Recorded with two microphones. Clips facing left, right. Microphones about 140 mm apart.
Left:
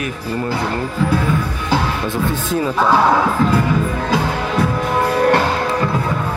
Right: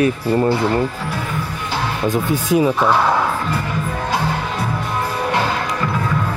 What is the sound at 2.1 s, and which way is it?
Speech, 15° right (ahead or behind).